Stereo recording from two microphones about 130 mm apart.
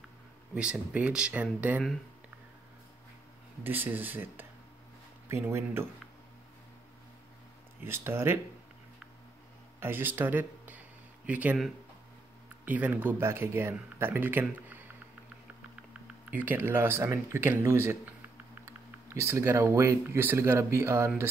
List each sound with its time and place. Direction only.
0.6 s speech: 10° right (ahead or behind)
3.6 s speech: 15° right (ahead or behind)
7.8 s speech: 20° right (ahead or behind)
9.8 s speech: 15° right (ahead or behind)
12.6 s speech: 15° right (ahead or behind)
16.3 s speech: 15° right (ahead or behind)